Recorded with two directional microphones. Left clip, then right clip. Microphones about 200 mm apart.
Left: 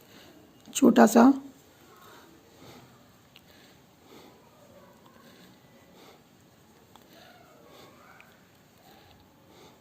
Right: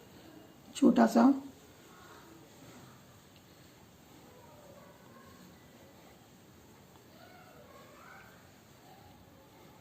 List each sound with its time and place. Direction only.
0.7 s speech: 55° left (ahead or behind)